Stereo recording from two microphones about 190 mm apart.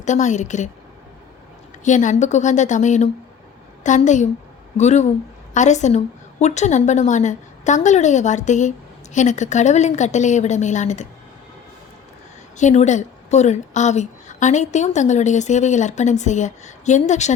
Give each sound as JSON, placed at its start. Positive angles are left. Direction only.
{"t": 0.0, "sound": "a woman's voice", "side_deg": 40}
{"t": 1.8, "sound": "a woman's voice", "side_deg": 40}
{"t": 12.5, "sound": "a woman's voice", "side_deg": 40}